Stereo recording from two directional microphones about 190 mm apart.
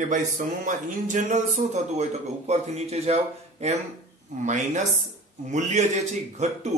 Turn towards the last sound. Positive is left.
turn(degrees=-35)  # may be behind; listen again after turning